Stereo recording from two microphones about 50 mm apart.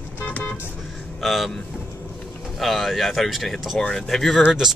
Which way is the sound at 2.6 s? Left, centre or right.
Centre.